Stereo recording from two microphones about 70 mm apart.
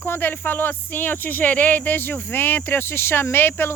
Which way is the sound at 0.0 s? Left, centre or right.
Left.